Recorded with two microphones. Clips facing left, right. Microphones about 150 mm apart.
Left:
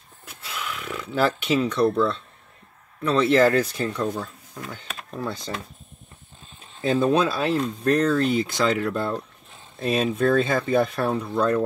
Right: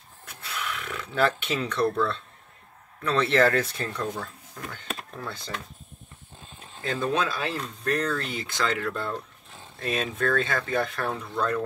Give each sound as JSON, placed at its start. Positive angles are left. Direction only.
{"t": 0.2, "sound": "a sound", "side_deg": 10}
{"t": 3.0, "sound": "speech", "side_deg": 10}
{"t": 6.8, "sound": "speech", "side_deg": 20}